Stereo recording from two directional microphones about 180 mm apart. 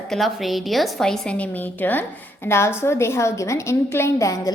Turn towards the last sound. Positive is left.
turn(degrees=15)  # may be behind; listen again after turning